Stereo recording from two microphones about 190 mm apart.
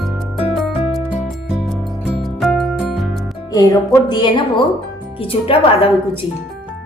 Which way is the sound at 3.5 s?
20° left (ahead or behind).